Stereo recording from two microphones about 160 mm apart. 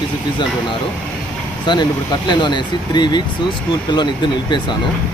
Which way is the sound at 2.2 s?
30° left (ahead or behind).